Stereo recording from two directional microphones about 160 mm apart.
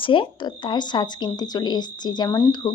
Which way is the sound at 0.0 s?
30° left (ahead or behind).